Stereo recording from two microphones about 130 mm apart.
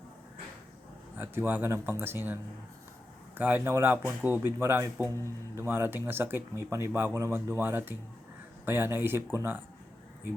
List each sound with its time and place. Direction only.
1.1 s speech: 15° right (ahead or behind)